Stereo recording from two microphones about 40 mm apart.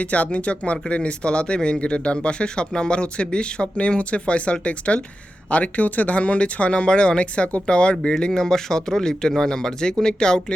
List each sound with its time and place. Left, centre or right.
0.0 s speech: left; by 10.4 s centre